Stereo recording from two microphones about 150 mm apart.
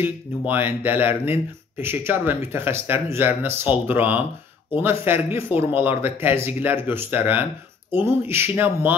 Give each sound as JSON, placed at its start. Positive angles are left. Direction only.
{"t": 0.5, "sound": "speech", "side_deg": -15}